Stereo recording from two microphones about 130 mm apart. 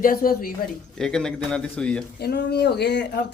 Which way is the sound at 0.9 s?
5° left (ahead or behind).